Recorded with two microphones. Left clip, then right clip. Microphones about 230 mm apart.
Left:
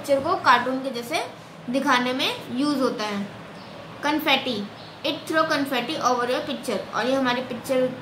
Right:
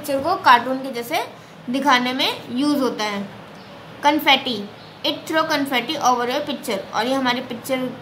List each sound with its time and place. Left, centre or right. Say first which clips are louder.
0.0 s a woman's voice: right 2 dB; right